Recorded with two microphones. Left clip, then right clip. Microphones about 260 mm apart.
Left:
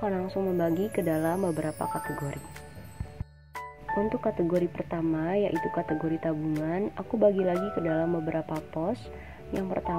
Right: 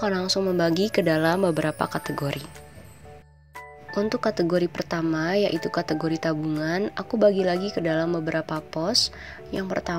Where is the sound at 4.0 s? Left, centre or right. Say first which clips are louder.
Right 5 dB; right.